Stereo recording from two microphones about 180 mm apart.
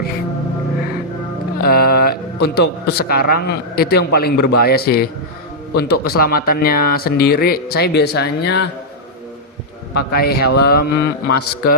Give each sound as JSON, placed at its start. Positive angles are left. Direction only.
{"t": 1.5, "sound": "a man's voice", "side_deg": 60}
{"t": 10.1, "sound": "speech", "side_deg": 60}